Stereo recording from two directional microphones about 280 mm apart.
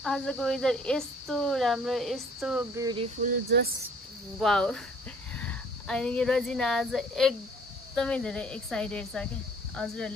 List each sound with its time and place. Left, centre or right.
0.0 s speech: centre
3.4 s speech: right
4.4 s speech: centre